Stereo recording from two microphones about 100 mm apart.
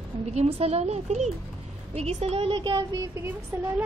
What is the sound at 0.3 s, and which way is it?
A woman's voice, 90° right.